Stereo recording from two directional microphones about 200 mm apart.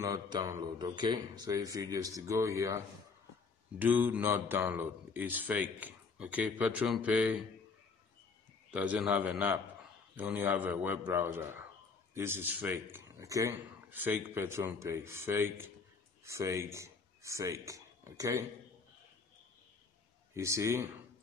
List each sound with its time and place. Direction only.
0.0 s a man's voice: 20° right (ahead or behind)
8.7 s a man's voice: 5° right (ahead or behind)
20.3 s a man's voice: 15° right (ahead or behind)